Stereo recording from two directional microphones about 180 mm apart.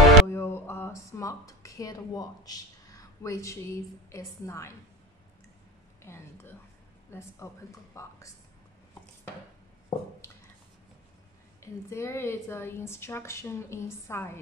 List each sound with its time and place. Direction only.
0.3 s speech: 15° left (ahead or behind)
6.0 s a woman's voice: 15° left (ahead or behind)
9.9 s a sound: 25° left (ahead or behind)
11.6 s a woman's voice: 15° left (ahead or behind)